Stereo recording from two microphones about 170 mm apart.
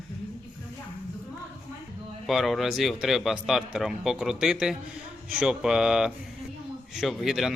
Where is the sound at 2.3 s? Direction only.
Centre (ahead or behind).